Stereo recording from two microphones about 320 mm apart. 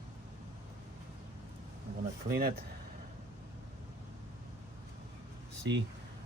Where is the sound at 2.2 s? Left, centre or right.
Right.